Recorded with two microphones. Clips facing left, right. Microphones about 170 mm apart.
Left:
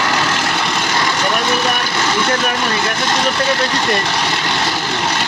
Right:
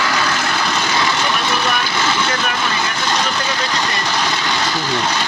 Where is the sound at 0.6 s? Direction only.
5° left (ahead or behind).